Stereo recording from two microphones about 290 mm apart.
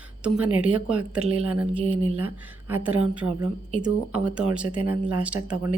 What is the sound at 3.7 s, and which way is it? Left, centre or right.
Speech, right.